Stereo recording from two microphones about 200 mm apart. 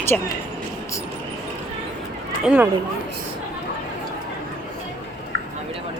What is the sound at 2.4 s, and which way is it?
Speech, 5° right (ahead or behind).